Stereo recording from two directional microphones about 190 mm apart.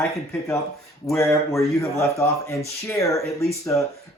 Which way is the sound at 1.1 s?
15° left (ahead or behind).